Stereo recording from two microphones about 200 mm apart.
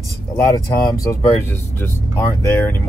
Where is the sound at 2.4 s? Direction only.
10° left (ahead or behind).